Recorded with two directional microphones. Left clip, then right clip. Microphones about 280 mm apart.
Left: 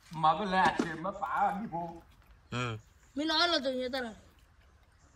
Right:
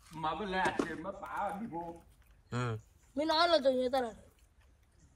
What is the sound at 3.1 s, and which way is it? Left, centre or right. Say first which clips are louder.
Speech: right 1 dB; centre.